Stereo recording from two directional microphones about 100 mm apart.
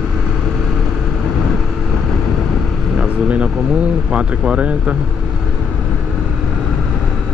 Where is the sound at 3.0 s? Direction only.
10° right (ahead or behind).